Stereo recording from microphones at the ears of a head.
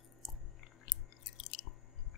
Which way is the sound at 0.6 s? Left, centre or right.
Left.